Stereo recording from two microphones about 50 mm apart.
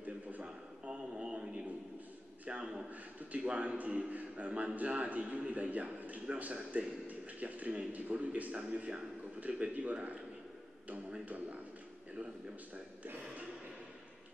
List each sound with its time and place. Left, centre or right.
0.0 s a sound: right
0.8 s radio: centre
2.4 s a man's voice: centre
2.9 s a man's voice: right
11.2 s a man's voice: right
12.7 s a man's voice: right